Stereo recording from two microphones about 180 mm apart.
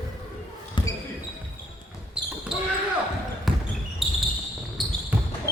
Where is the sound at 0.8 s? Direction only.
25° left (ahead or behind).